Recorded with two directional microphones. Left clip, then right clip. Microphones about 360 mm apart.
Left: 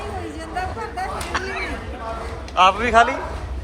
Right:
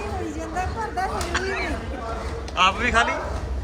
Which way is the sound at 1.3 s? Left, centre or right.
Centre.